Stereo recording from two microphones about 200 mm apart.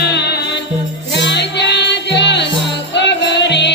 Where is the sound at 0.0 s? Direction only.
55° left (ahead or behind).